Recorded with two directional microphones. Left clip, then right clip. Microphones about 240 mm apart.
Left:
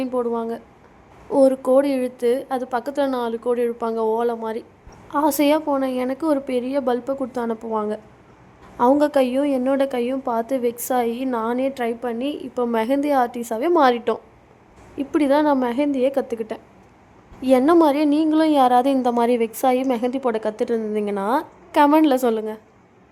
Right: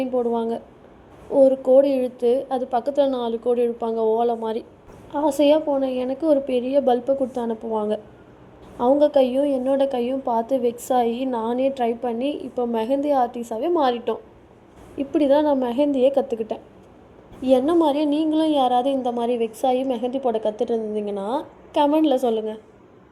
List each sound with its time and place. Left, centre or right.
0.0 s a woman's voice: centre
0.3 s speech: centre
1.3 s a woman's voice: centre
9.0 s a woman's voice: centre